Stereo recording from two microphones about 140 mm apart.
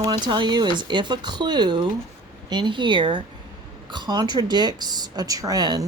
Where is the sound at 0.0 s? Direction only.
35° right (ahead or behind).